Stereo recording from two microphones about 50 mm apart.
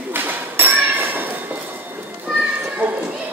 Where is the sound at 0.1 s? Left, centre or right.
Right.